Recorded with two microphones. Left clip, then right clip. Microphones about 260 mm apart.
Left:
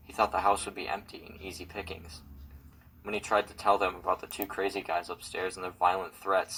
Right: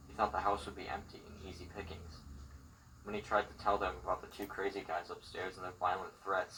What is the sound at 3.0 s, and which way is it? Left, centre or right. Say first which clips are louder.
Speech: left 7 dB; left.